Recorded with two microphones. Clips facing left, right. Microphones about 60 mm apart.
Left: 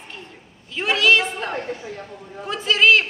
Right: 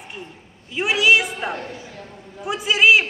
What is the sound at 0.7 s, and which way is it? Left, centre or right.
A man's voice, centre.